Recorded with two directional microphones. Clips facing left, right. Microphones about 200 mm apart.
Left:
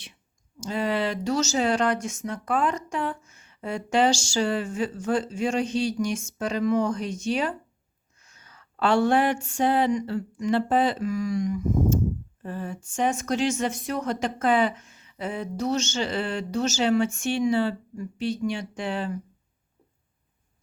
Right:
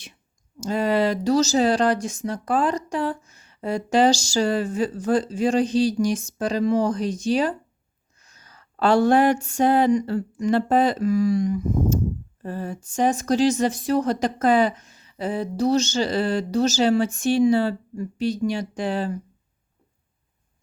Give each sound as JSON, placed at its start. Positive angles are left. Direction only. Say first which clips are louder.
{"t": 0.6, "sound": "speech", "louder": "right 5 dB", "side_deg": -40}